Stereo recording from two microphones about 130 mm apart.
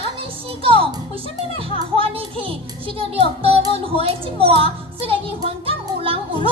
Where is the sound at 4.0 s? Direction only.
45° right (ahead or behind).